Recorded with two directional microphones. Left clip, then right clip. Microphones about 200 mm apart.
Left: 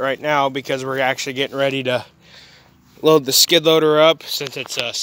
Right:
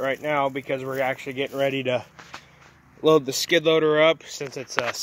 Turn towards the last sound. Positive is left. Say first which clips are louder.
# left 3 dB
turn(degrees=10)  # may be behind; listen again after turning